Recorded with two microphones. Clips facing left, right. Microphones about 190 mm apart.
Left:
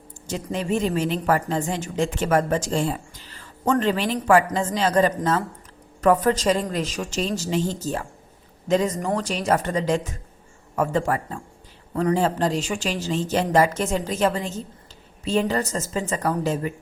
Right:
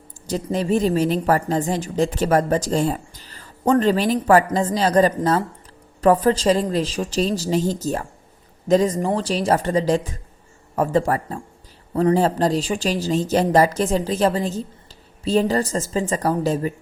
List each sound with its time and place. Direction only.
0.3 s a woman's voice: 35° right (ahead or behind)